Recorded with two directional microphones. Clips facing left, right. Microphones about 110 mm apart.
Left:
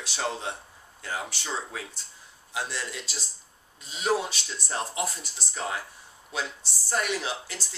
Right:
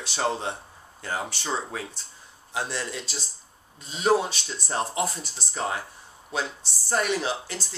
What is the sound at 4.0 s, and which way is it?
Speech, 40° right (ahead or behind).